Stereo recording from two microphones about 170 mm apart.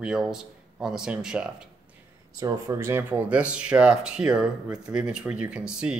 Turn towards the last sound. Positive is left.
turn(degrees=-5)  # may be behind; listen again after turning